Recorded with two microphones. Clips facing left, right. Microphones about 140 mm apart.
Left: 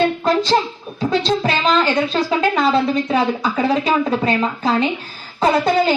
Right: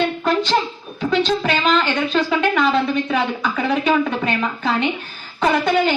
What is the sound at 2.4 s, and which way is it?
Speech, 35° left (ahead or behind).